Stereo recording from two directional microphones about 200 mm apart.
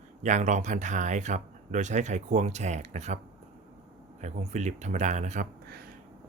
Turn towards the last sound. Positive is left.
turn(degrees=-45)  # may be behind; listen again after turning